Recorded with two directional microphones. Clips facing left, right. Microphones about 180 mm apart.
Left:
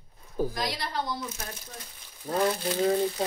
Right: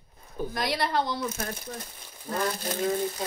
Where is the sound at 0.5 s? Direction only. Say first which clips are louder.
Right 5 dB; 65° right (ahead or behind).